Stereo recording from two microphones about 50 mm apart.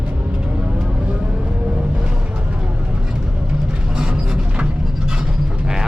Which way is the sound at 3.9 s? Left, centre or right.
Centre.